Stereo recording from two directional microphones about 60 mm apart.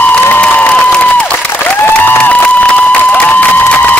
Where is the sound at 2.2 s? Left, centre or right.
Left.